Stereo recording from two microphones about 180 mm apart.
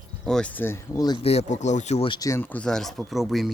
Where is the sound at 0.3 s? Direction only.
5° left (ahead or behind); by 1.2 s 20° left (ahead or behind).